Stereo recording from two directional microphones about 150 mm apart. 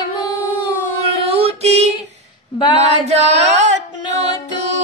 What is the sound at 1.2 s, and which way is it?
Female singing, 40° right (ahead or behind).